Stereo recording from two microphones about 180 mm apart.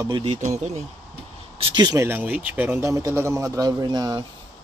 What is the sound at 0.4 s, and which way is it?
Speech, 40° right (ahead or behind).